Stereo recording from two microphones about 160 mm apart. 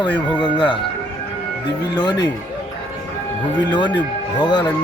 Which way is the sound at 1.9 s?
25° left (ahead or behind).